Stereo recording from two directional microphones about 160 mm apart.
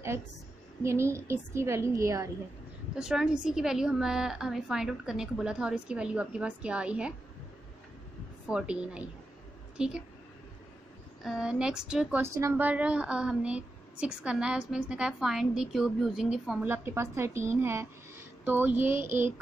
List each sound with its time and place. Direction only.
0.8 s a woman's voice: 15° right (ahead or behind)
3.0 s speech: 5° right (ahead or behind)
8.5 s a woman's voice: 5° right (ahead or behind)
11.2 s speech: 5° right (ahead or behind)
16.6 s a woman's voice: 15° right (ahead or behind)